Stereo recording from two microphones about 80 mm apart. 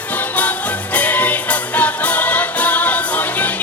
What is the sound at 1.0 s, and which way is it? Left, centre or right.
Music, left.